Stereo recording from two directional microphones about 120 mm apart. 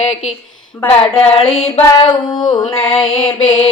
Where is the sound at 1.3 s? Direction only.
50° left (ahead or behind).